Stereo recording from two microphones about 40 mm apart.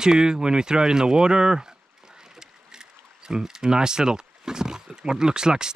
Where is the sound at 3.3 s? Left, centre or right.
Centre.